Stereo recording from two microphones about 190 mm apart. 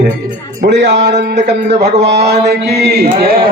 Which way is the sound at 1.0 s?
60° right (ahead or behind).